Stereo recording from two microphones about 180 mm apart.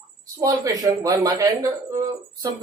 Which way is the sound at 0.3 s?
20° right (ahead or behind).